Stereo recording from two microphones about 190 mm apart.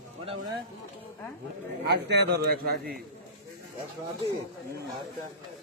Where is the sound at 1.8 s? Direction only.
60° right (ahead or behind).